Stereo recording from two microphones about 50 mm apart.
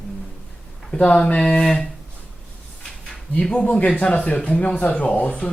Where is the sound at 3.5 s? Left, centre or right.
Left.